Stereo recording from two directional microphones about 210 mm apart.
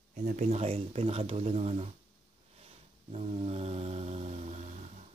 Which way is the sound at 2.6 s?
30° right (ahead or behind).